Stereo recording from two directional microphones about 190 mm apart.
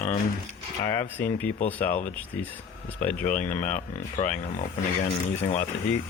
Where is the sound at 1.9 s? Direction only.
40° left (ahead or behind).